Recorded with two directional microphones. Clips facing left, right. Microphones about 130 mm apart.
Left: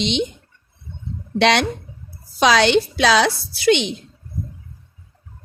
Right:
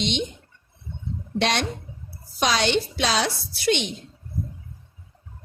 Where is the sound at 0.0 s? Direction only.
90° left.